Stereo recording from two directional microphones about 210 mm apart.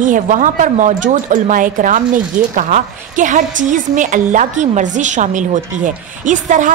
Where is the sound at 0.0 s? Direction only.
40° right (ahead or behind).